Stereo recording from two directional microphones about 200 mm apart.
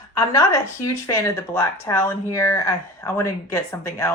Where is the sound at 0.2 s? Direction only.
15° left (ahead or behind).